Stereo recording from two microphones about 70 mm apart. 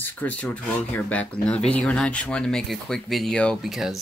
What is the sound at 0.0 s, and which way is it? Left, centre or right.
Speech, left.